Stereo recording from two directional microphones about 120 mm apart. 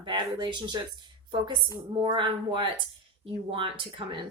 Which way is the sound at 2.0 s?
45° right (ahead or behind).